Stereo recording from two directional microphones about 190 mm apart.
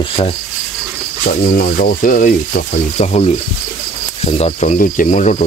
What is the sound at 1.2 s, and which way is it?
Speech, 50° left (ahead or behind).